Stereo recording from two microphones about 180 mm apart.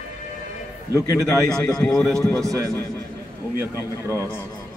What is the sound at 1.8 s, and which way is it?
Speech, 5° left (ahead or behind).